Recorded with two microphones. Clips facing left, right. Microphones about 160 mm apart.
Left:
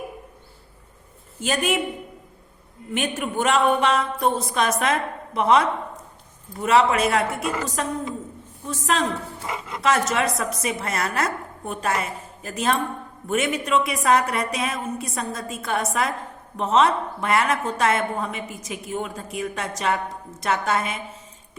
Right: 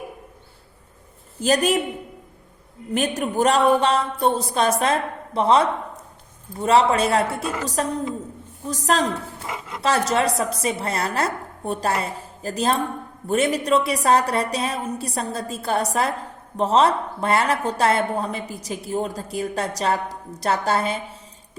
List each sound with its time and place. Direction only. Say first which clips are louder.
1.4 s a woman's voice: right 4 dB; 35° right (ahead or behind)
2.9 s a woman's voice: right 3 dB; 35° right (ahead or behind)